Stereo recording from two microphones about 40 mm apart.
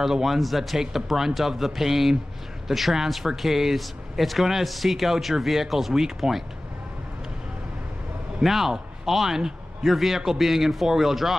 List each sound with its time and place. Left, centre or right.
0.0 s a man's voice: centre
8.4 s a man's voice: centre